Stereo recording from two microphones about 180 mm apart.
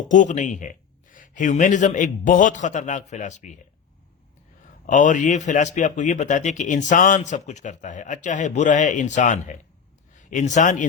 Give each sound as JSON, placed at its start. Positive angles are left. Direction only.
{"t": 0.0, "sound": "speech", "side_deg": 45}
{"t": 4.9, "sound": "a man's voice", "side_deg": 45}